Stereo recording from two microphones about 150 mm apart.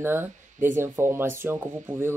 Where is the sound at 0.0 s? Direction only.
15° right (ahead or behind).